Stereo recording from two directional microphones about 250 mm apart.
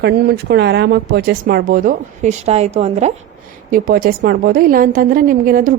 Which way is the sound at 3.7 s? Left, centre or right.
Right.